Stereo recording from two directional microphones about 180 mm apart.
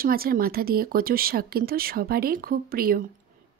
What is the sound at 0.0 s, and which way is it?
Speech, 55° right (ahead or behind).